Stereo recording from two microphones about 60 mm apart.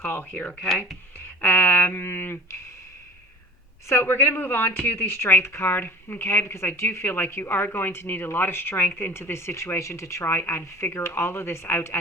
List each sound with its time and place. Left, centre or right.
0.1 s speech: left
3.8 s speech: left